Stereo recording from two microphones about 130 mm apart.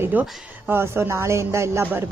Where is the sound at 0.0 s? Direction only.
10° right (ahead or behind).